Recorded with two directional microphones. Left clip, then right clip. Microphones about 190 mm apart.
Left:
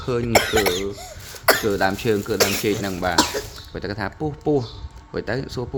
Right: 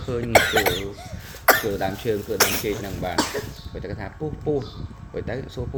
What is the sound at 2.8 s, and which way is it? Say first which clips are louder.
Speech: left 5 dB; 40° left (ahead or behind).